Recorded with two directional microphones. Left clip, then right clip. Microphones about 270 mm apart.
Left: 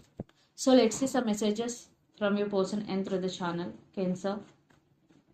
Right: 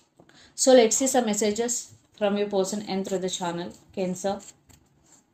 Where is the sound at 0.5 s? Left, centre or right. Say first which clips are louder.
Right 7 dB; right.